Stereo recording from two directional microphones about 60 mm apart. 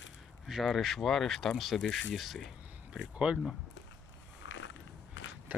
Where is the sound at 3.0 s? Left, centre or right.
Centre.